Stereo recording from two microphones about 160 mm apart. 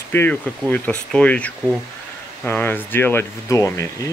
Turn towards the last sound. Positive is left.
turn(degrees=20)  # may be behind; listen again after turning